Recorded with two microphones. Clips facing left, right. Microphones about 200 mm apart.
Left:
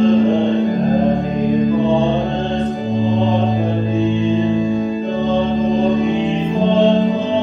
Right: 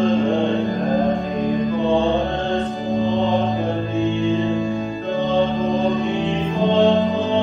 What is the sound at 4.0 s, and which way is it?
Music, 15° left (ahead or behind).